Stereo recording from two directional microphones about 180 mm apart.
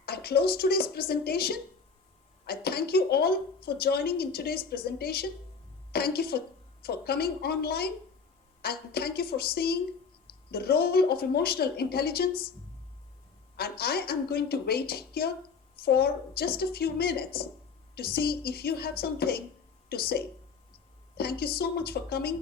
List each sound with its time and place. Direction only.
0.0 s speech: 60° left (ahead or behind)
13.6 s speech: 60° left (ahead or behind)